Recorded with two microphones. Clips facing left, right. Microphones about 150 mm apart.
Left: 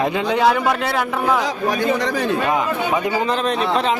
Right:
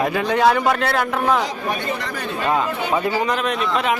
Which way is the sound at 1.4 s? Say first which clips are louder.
Left 5 dB; 90° left.